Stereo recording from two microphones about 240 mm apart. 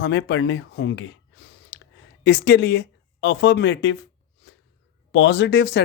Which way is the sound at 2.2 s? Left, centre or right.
Left.